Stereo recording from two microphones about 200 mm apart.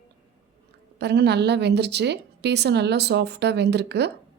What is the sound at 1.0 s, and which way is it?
Speech, 55° right (ahead or behind).